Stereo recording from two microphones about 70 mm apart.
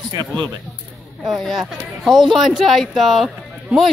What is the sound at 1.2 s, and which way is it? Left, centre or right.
A man's voice, centre.